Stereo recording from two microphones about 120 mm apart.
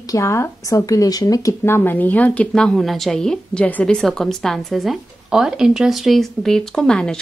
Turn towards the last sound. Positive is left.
turn(degrees=5)  # may be behind; listen again after turning